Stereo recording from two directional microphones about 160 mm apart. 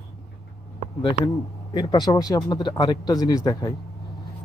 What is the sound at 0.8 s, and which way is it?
Speech, 35° left (ahead or behind).